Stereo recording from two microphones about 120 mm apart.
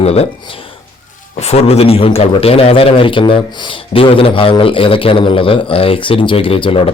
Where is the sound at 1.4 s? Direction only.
60° left (ahead or behind).